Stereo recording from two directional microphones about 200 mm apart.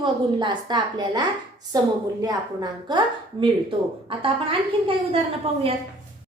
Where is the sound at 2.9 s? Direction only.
20° right (ahead or behind).